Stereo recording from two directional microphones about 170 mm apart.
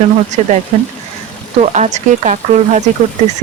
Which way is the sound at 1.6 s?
45° right (ahead or behind).